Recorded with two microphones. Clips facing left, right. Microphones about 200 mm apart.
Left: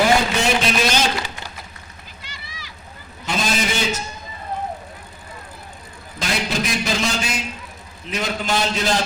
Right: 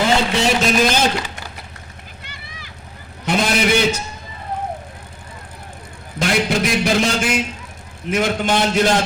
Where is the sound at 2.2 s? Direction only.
55° right (ahead or behind).